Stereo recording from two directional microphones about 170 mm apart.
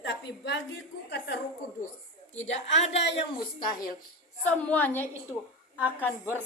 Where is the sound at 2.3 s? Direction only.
10° left (ahead or behind).